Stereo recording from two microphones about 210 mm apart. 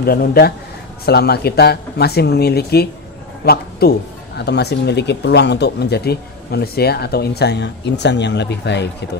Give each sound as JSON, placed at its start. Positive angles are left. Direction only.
{"t": 0.0, "sound": "speech", "side_deg": 45}